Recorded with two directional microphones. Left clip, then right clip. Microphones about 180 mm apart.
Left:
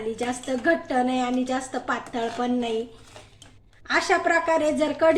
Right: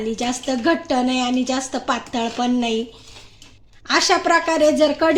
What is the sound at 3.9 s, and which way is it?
Speech, 55° right (ahead or behind).